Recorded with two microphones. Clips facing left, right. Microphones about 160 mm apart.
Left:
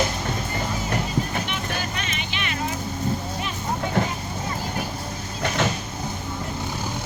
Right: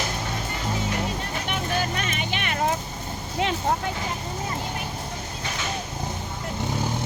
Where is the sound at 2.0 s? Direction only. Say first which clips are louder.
Right 2 dB; 50° right (ahead or behind).